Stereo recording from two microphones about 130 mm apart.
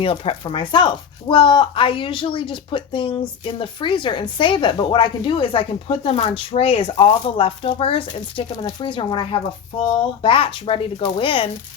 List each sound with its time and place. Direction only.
0.0 s a woman's voice: 45° left (ahead or behind)